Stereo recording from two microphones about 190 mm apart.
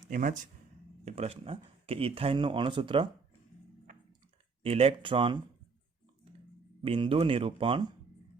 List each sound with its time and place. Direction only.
0.1 s speech: 45° right (ahead or behind)
1.0 s speech: 35° right (ahead or behind)
4.6 s speech: 30° right (ahead or behind)
6.8 s speech: 25° right (ahead or behind)